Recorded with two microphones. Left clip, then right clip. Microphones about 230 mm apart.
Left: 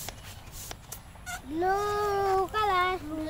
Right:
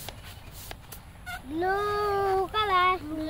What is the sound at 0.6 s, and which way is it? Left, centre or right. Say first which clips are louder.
Run: left 1 dB; centre.